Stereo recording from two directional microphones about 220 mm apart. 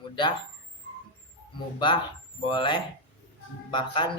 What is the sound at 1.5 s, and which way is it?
A man's voice, 20° left (ahead or behind).